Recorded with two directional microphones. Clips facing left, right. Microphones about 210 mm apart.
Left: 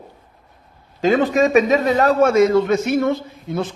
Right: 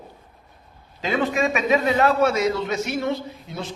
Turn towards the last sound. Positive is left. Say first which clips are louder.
# left 7 dB
turn(degrees=50)  # may be behind; listen again after turning